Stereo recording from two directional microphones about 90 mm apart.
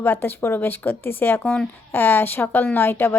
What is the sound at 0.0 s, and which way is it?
A woman's voice, 25° left (ahead or behind).